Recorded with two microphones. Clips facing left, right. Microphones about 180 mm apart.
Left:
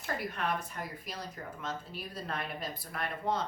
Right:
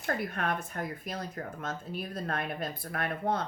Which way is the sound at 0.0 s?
50° right (ahead or behind).